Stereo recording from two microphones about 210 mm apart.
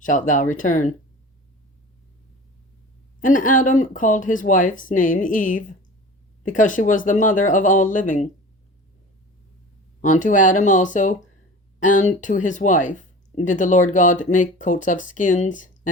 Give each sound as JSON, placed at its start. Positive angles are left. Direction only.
{"t": 0.0, "sound": "speech", "side_deg": 40}
{"t": 3.2, "sound": "speech", "side_deg": 40}
{"t": 10.0, "sound": "speech", "side_deg": 35}